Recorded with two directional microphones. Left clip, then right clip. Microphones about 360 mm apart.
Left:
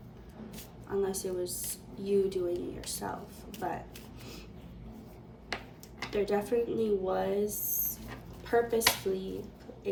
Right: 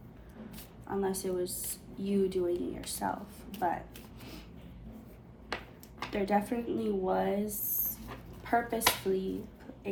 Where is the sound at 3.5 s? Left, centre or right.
Centre.